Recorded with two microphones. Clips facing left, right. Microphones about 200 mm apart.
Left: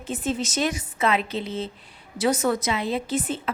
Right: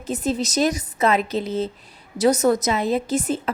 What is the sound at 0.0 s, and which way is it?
A woman's voice, 40° right (ahead or behind).